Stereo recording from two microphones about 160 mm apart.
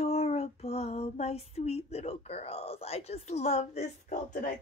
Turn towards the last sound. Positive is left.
turn(degrees=45)  # may be behind; listen again after turning